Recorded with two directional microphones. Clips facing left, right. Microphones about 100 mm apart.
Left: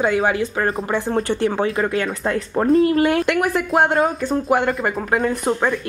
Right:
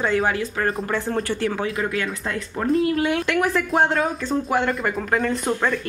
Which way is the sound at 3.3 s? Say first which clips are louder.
Left 2 dB; 10° left (ahead or behind).